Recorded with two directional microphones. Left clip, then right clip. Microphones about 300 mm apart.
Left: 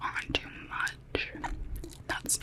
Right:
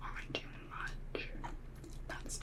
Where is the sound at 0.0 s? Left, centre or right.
Left.